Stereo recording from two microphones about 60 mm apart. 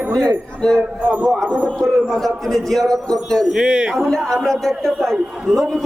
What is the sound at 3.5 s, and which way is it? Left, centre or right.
Speech, centre.